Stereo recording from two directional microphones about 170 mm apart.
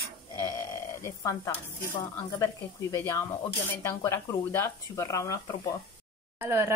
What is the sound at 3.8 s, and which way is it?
Speech, 15° left (ahead or behind).